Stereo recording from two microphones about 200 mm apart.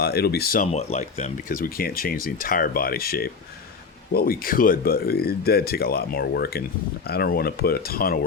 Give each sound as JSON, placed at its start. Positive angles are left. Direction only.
{"t": 0.0, "sound": "speech", "side_deg": 50}
{"t": 0.7, "sound": "speech", "side_deg": 30}